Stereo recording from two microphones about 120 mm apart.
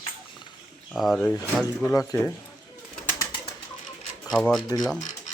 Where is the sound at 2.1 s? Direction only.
25° left (ahead or behind).